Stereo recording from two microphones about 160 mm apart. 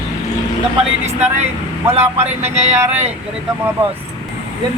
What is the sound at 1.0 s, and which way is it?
Speech, 45° right (ahead or behind).